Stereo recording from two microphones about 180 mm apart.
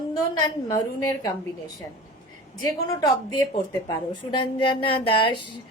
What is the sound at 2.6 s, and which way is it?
Speech, 20° left (ahead or behind).